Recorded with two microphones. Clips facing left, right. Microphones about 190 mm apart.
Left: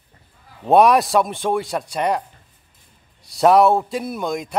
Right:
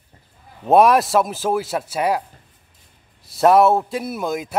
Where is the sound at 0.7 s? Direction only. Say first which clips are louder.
Even; centre (ahead or behind).